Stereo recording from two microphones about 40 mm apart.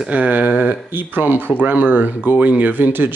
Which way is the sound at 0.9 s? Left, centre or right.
Right.